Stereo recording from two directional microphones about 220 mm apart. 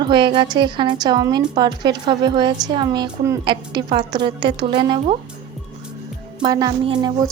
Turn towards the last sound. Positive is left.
turn(degrees=-20)  # may be behind; listen again after turning